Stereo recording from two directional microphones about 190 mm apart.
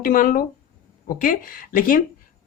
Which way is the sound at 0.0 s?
45° left (ahead or behind).